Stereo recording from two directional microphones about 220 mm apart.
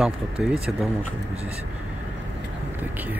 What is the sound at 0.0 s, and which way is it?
Speech, centre (ahead or behind).